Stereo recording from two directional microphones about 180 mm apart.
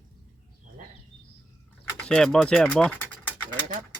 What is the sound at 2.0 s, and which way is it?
Speech, 5° left (ahead or behind).